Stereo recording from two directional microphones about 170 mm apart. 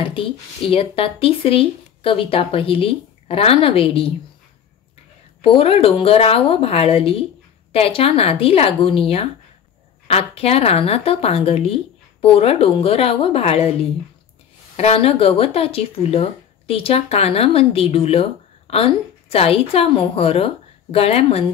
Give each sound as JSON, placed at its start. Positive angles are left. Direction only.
{"t": 0.0, "sound": "speech", "side_deg": 30}
{"t": 5.4, "sound": "speech", "side_deg": 35}
{"t": 14.8, "sound": "speech", "side_deg": 35}